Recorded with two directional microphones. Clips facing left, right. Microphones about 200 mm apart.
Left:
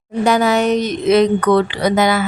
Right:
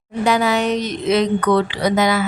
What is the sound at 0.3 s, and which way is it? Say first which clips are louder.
A woman's voice: left 3 dB; 45° left (ahead or behind).